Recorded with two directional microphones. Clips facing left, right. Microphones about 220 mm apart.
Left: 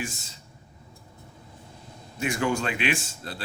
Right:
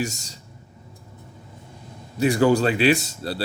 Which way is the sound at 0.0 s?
40° right (ahead or behind).